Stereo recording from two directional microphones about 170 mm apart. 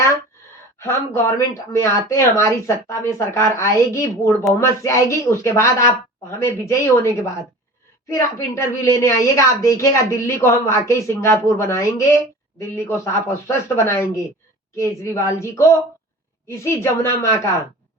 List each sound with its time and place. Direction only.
0.8 s a woman's voice: 15° left (ahead or behind)